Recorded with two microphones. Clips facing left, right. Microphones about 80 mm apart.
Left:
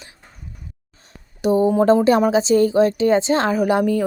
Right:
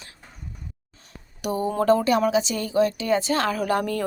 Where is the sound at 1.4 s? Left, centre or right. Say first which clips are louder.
Left 9 dB; left.